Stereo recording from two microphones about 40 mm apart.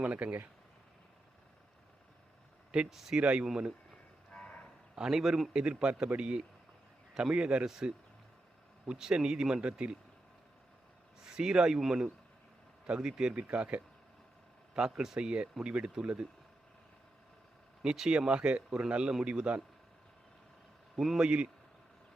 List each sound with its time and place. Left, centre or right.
0.0 s speech: right
2.9 s a man's voice: centre
3.2 s speech: right
3.4 s a man's voice: centre
4.3 s cattle: left
4.9 s a man's voice: centre
5.5 s a man's voice: right
11.3 s a man's voice: centre
13.3 s speech: right
14.8 s a man's voice: centre
17.8 s speech: centre
21.2 s speech: right